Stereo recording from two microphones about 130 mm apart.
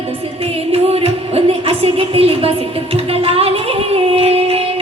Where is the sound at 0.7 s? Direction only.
50° right (ahead or behind).